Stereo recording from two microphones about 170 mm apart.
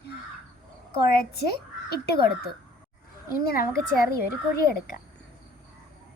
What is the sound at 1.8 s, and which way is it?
Speech, 70° left (ahead or behind).